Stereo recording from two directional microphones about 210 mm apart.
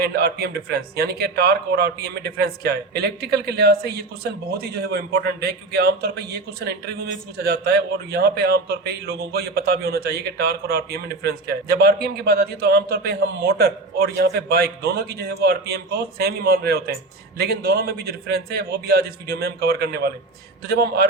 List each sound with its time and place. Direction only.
0.0 s speech: 50° right (ahead or behind)